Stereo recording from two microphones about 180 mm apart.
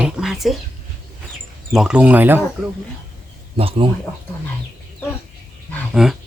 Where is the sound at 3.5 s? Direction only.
30° right (ahead or behind).